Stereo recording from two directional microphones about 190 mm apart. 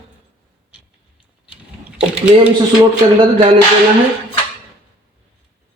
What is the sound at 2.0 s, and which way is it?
Speech, 5° right (ahead or behind).